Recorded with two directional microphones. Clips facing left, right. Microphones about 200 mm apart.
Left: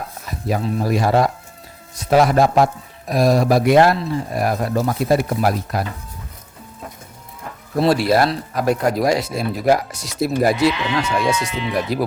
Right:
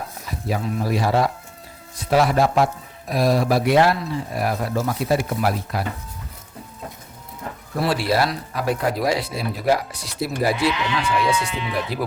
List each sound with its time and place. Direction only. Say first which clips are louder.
0.8 s speech: left 3 dB; 45° left (ahead or behind)
7.9 s speech: left 5 dB; 45° left (ahead or behind)